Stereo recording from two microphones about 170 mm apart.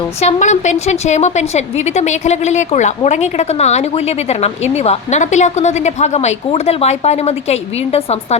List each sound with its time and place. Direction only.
0.2 s a woman's voice: 40° left (ahead or behind)